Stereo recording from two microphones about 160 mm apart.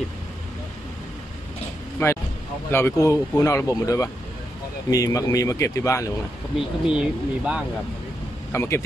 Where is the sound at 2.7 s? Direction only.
15° left (ahead or behind).